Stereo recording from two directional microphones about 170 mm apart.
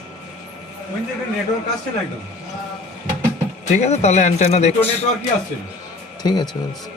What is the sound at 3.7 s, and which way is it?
Speech, 40° left (ahead or behind).